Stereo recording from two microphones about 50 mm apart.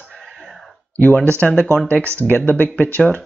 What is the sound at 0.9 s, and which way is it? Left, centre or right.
Speech, left.